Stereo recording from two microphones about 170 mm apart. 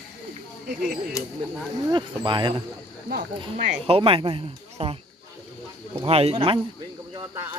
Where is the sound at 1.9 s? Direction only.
25° right (ahead or behind).